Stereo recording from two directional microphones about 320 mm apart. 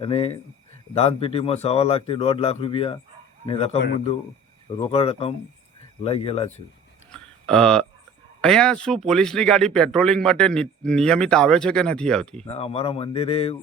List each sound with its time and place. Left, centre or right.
0.0 s a man's voice: centre
4.8 s speech: centre
7.1 s a sound: centre
8.4 s speech: centre
12.5 s a man's voice: centre